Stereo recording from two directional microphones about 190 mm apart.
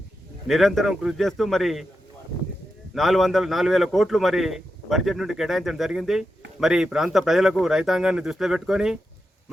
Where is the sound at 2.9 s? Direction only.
Centre (ahead or behind).